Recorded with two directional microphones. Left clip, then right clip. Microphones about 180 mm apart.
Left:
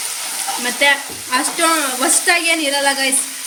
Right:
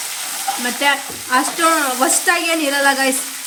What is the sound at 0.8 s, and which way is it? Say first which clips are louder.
A woman's voice: left 4 dB; 45° right (ahead or behind).